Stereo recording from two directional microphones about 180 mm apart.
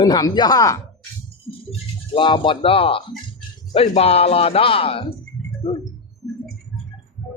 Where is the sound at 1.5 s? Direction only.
30° left (ahead or behind).